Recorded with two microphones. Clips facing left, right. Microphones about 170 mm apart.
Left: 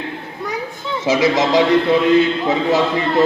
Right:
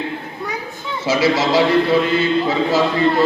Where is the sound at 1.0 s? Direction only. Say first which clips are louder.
Left 1 dB; 15° left (ahead or behind).